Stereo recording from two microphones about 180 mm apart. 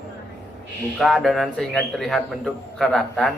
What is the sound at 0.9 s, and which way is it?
Speech, centre (ahead or behind).